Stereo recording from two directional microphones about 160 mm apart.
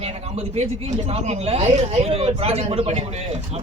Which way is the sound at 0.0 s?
40° right (ahead or behind).